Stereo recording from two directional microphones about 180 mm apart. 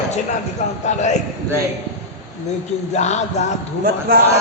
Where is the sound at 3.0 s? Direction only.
40° left (ahead or behind).